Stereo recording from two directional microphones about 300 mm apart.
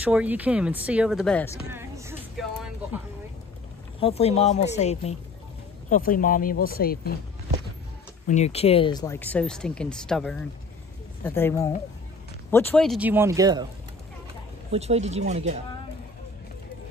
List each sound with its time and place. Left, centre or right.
0.0 s speech: centre
1.7 s a sound: centre
4.0 s speech: left
8.3 s speech: left; by 13.7 s centre
14.7 s speech: right